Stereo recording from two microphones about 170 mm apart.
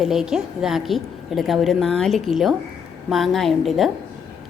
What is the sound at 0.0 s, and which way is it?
A woman's voice, centre (ahead or behind).